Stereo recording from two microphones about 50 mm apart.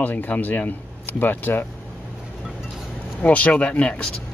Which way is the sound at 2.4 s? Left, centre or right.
Centre.